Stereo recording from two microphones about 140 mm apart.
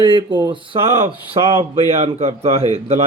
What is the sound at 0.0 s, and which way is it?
Speech, 35° right (ahead or behind).